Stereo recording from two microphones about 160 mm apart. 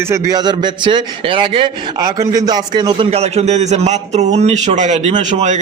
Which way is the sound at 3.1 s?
40° right (ahead or behind).